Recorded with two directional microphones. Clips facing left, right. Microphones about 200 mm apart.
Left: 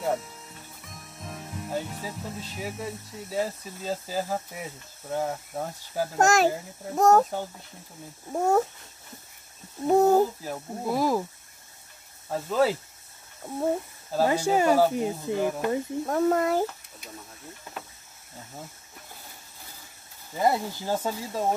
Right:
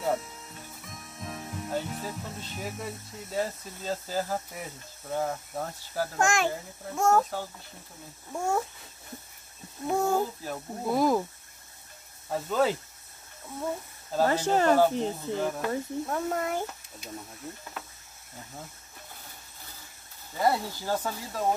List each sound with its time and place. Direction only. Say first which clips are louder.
0.0 s speech: left 1 dB; centre (ahead or behind)
6.1 s speech: left 6 dB; 40° left (ahead or behind)
8.3 s speech: left 6 dB; 40° left (ahead or behind)
9.8 s speech: left 7 dB; 40° left (ahead or behind)
10.4 s speech: left 1 dB; 5° left (ahead or behind)
12.3 s speech: left 2 dB; centre (ahead or behind)
14.1 s speech: left 2 dB; 10° left (ahead or behind)
16.1 s speech: left 9 dB; 35° left (ahead or behind)
20.3 s speech: left 2 dB; 20° left (ahead or behind)